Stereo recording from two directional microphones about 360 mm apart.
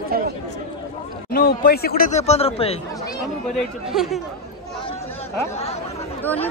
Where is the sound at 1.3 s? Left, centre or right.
Left.